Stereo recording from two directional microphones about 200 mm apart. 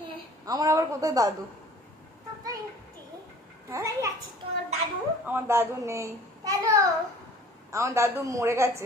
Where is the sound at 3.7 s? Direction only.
15° right (ahead or behind).